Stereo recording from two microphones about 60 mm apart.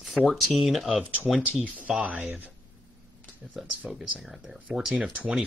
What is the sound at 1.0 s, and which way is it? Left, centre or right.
Speech, right.